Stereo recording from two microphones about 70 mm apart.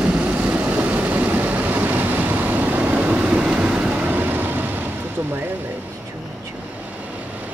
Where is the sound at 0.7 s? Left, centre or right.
Right.